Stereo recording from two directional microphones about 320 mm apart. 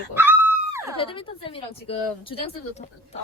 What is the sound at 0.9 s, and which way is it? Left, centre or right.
Speech, centre.